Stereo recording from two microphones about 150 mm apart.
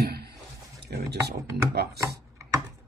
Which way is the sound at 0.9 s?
90° right.